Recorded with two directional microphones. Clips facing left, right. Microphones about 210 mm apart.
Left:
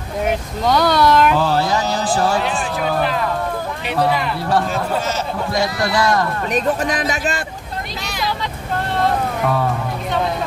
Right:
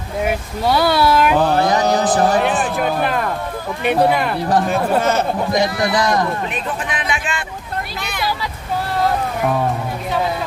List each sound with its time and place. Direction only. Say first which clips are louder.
0.2 s speech: even; 5° right (ahead or behind)
2.0 s speech: right 3 dB; 20° right (ahead or behind)
2.6 s speech: right 1 dB; 55° right (ahead or behind)
5.5 s speech: left 1 dB; 20° right (ahead or behind)
6.5 s a man's voice: left 6 dB; 40° left (ahead or behind)